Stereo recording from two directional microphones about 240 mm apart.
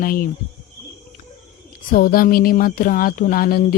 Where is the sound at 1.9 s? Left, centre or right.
Left.